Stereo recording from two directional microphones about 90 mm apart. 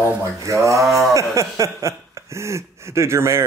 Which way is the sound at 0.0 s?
35° right (ahead or behind).